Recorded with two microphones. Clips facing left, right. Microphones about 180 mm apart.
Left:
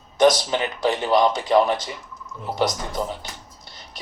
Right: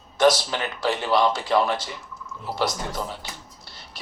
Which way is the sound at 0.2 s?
20° left (ahead or behind).